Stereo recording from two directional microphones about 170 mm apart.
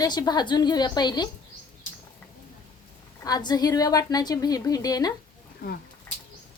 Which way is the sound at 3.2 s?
25° left (ahead or behind).